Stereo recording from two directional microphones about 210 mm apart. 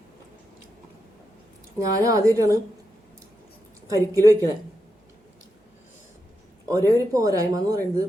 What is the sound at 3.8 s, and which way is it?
Speech, 15° right (ahead or behind).